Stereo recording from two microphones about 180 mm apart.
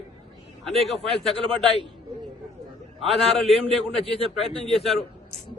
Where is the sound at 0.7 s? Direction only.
Centre (ahead or behind).